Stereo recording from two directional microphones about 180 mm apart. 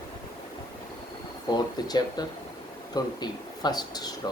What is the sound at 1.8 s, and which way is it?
Speech, 20° left (ahead or behind).